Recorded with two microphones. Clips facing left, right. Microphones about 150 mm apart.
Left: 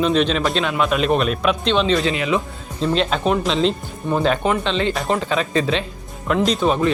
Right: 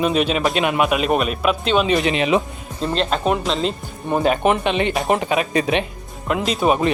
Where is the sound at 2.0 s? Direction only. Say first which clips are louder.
Right 2 dB; 20° right (ahead or behind).